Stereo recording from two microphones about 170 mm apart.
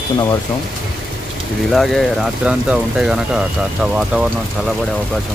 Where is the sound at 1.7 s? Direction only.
Centre (ahead or behind).